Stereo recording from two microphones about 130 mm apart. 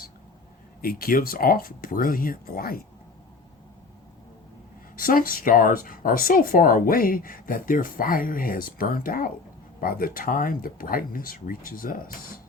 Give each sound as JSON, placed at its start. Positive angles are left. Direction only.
{"t": 1.1, "sound": "speech", "side_deg": 90}
{"t": 4.9, "sound": "speech", "side_deg": 90}